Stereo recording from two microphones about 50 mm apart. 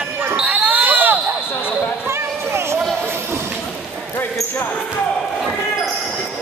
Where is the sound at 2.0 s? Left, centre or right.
Right.